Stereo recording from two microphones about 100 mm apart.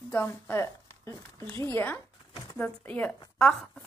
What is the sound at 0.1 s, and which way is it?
Speech, 25° left (ahead or behind).